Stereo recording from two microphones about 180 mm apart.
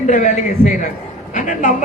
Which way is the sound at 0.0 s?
45° left (ahead or behind).